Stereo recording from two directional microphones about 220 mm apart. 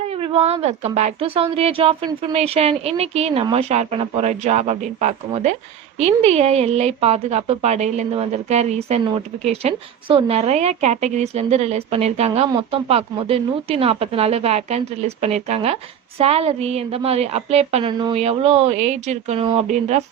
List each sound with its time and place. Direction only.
0.1 s speech: 25° right (ahead or behind)